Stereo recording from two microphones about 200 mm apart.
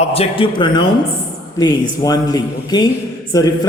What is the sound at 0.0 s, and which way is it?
A woman's voice, 30° left (ahead or behind).